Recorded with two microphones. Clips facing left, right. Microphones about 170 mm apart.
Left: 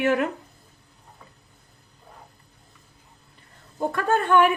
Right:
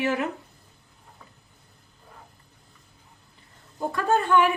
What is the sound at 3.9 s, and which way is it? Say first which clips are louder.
Speech: left 1 dB; 55° left (ahead or behind).